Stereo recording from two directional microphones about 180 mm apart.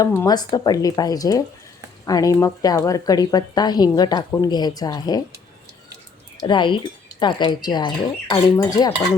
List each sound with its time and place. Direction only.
0.0 s speech: 15° left (ahead or behind)
6.4 s speech: 25° left (ahead or behind)